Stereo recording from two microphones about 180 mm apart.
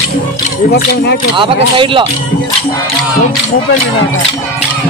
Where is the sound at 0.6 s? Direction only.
60° left (ahead or behind).